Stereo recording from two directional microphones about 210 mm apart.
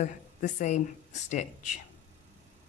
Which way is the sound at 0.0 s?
35° left (ahead or behind).